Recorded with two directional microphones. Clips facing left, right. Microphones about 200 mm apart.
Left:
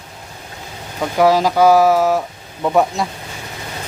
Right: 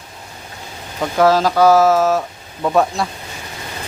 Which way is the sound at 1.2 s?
15° left (ahead or behind).